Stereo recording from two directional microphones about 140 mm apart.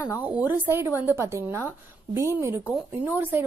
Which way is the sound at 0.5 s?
15° right (ahead or behind).